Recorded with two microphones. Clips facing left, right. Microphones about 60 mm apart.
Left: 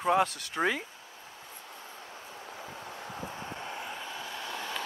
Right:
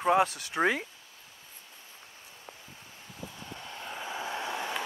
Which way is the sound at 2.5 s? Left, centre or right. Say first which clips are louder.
Left 9 dB; left.